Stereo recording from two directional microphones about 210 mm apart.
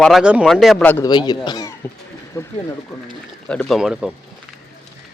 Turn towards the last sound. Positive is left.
turn(degrees=0)  # may be behind; listen again after turning